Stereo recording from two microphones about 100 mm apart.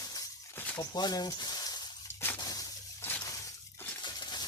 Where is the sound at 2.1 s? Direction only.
20° left (ahead or behind).